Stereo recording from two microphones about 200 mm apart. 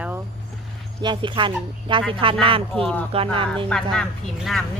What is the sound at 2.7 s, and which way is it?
Speech, 5° left (ahead or behind).